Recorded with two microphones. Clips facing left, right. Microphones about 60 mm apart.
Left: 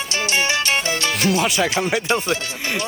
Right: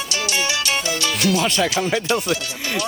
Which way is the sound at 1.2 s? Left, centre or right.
Left.